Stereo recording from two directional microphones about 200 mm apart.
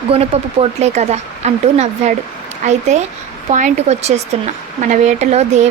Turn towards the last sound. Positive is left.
turn(degrees=-35)  # may be behind; listen again after turning